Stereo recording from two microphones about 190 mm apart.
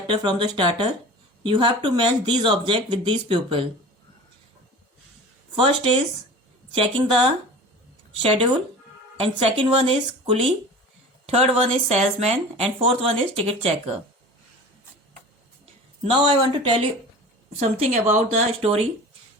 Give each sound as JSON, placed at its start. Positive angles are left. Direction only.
{"t": 0.1, "sound": "speech", "side_deg": -25}
{"t": 5.5, "sound": "speech", "side_deg": -30}
{"t": 16.1, "sound": "speech", "side_deg": -25}